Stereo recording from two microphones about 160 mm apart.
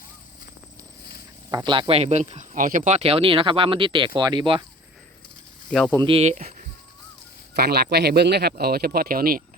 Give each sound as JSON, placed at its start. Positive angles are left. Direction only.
{"t": 1.5, "sound": "speech", "side_deg": -25}
{"t": 6.0, "sound": "speech", "side_deg": -35}
{"t": 6.3, "sound": "a sound", "side_deg": -55}
{"t": 7.5, "sound": "speech", "side_deg": -85}